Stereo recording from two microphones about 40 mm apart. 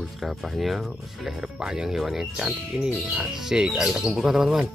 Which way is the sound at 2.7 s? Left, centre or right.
Right.